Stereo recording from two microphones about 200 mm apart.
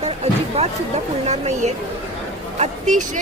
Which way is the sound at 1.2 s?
35° right (ahead or behind).